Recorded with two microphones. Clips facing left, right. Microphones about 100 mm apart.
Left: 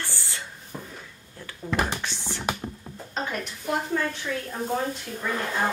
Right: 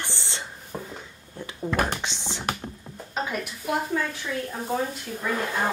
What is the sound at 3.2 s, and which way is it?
Speech, 5° right (ahead or behind).